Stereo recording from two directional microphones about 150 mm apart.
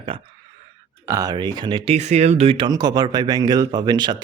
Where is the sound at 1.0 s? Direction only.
25° right (ahead or behind).